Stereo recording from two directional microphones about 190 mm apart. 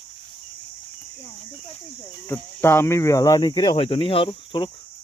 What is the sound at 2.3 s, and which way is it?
Speech, 10° left (ahead or behind).